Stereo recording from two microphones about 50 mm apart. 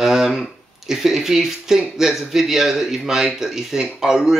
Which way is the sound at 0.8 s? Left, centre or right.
Centre.